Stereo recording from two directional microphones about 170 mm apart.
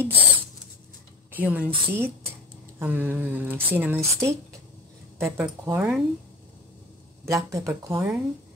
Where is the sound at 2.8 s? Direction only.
10° right (ahead or behind).